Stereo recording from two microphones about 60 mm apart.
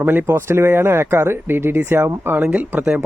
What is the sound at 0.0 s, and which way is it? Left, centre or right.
Speech, right.